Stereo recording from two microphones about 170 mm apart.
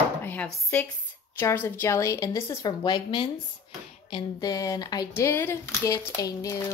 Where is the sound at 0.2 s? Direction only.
10° left (ahead or behind).